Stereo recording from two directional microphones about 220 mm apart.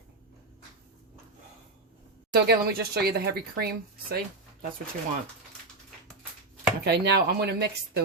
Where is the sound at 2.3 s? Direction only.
45° right (ahead or behind).